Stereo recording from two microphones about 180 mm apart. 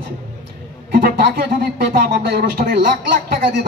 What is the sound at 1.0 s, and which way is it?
A man's voice, 60° right (ahead or behind).